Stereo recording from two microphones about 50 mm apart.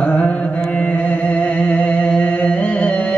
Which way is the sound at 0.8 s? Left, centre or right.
Left.